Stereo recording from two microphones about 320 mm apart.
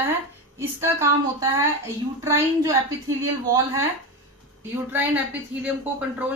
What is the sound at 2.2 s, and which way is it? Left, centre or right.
A woman's voice, centre.